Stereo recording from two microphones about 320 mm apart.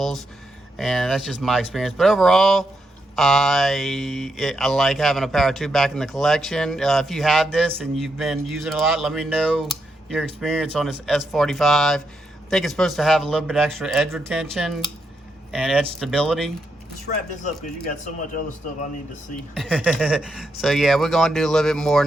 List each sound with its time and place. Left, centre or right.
0.8 s speech: centre
17.4 s speech: left
19.5 s speech: centre